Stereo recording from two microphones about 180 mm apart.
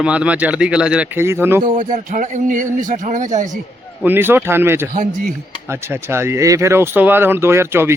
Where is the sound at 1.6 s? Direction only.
45° right (ahead or behind).